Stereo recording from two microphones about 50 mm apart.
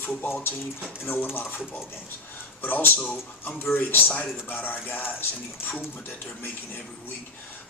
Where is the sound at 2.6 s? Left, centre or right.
Left.